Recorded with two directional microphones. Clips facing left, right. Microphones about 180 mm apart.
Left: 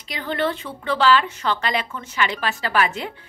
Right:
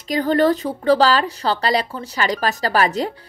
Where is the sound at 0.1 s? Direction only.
40° right (ahead or behind).